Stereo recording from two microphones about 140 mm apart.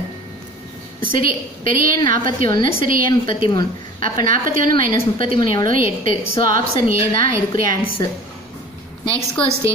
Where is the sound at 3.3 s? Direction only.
35° left (ahead or behind).